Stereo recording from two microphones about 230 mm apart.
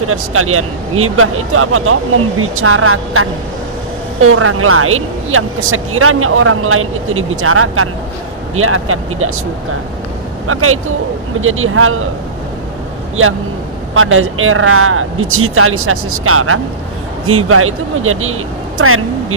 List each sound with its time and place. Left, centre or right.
0.1 s speech: right
10.4 s speech: right
13.9 s speech: right